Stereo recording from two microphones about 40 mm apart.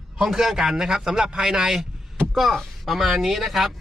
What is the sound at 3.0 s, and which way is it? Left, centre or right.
Speech, centre.